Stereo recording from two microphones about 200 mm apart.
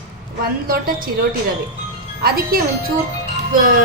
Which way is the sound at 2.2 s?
50° right (ahead or behind).